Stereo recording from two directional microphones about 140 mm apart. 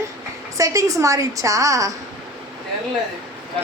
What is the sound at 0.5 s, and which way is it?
A woman's voice, 25° right (ahead or behind).